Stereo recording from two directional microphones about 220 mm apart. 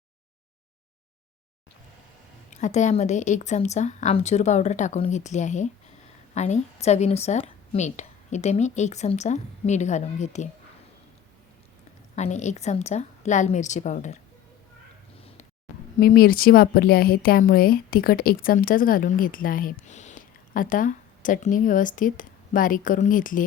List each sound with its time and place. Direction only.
2.5 s speech: 35° left (ahead or behind)
12.1 s speech: 30° left (ahead or behind)
16.0 s speech: 45° left (ahead or behind)